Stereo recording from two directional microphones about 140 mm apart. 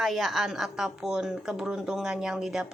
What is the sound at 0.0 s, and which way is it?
A woman's voice, centre (ahead or behind).